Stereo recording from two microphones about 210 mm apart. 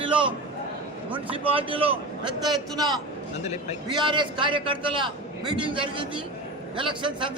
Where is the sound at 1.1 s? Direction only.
25° right (ahead or behind).